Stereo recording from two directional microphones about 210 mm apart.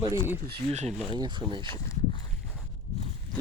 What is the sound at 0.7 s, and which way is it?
Speech, 30° right (ahead or behind).